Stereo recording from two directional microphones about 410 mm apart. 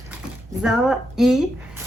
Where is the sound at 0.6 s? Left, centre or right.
Centre.